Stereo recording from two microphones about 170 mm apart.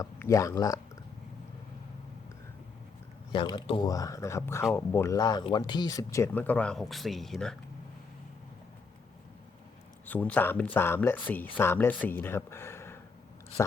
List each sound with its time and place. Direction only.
0.0 s speech: 20° left (ahead or behind)
3.3 s speech: 25° left (ahead or behind); by 7.5 s centre (ahead or behind)
10.1 s speech: 10° left (ahead or behind)